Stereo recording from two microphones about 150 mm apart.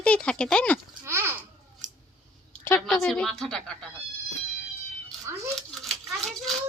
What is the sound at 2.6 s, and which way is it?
Speech, 15° left (ahead or behind).